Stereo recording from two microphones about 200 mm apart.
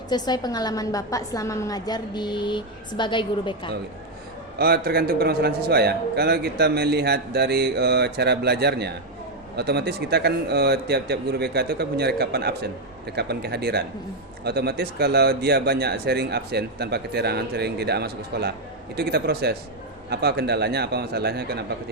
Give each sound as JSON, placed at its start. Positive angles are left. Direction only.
{"t": 0.1, "sound": "a woman's voice", "side_deg": 20}
{"t": 4.5, "sound": "a man's voice", "side_deg": -50}